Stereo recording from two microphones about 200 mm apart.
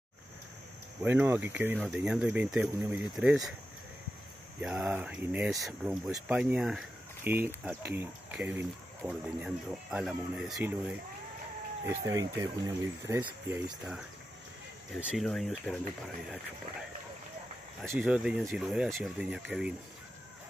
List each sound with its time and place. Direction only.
1.0 s speech: 10° right (ahead or behind)
4.6 s speech: 5° right (ahead or behind)
15.0 s speech: centre (ahead or behind)
17.8 s speech: 5° right (ahead or behind)